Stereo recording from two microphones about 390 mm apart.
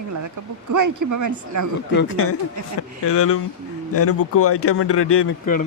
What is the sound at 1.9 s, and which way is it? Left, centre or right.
Speech, left.